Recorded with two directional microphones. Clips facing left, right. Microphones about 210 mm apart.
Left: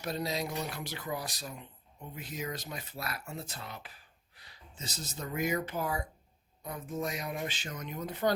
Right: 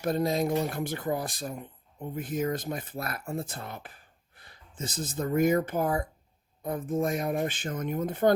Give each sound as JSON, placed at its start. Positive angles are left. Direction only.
{"t": 0.0, "sound": "speech", "side_deg": -50}